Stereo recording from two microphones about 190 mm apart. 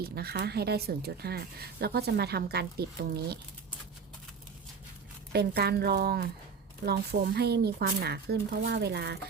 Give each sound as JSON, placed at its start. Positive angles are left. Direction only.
{"t": 0.0, "sound": "speech", "side_deg": -55}
{"t": 5.3, "sound": "speech", "side_deg": -55}